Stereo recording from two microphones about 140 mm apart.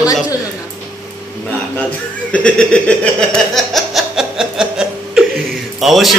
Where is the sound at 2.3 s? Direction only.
5° left (ahead or behind).